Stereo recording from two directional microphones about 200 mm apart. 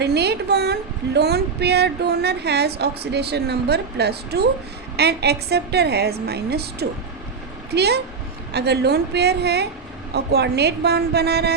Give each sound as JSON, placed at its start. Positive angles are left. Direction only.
{"t": 0.0, "sound": "a woman's voice", "side_deg": -55}